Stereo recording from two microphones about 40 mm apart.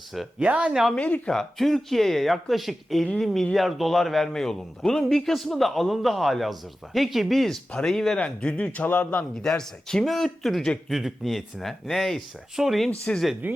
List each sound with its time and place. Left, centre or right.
0.4 s speech: right
0.9 s speech: left
1.3 s a man's voice: centre
8.2 s speech: left
8.5 s speech: left
9.4 s speech: centre
10.0 s a man's voice: centre
12.5 s speech: centre
13.1 s speech: left
13.4 s speech: right